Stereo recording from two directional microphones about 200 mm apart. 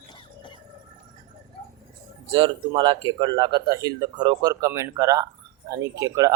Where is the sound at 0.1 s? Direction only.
25° left (ahead or behind).